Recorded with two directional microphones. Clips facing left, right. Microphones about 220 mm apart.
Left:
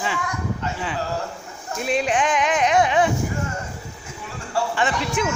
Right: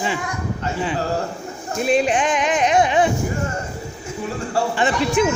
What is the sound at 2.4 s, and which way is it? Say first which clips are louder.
Speech: right 1 dB; centre (ahead or behind).